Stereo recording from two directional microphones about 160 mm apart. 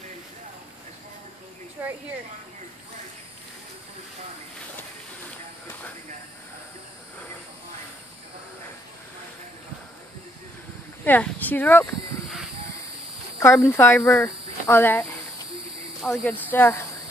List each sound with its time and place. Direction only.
1.8 s speech: 10° right (ahead or behind)
11.1 s speech: 10° left (ahead or behind)
13.4 s speech: 15° left (ahead or behind)